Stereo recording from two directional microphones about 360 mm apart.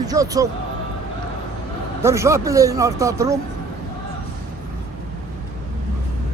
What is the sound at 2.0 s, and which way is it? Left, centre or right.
Speech, centre.